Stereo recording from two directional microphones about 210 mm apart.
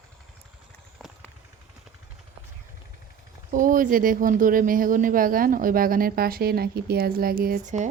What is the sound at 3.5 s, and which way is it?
Speech, 40° right (ahead or behind).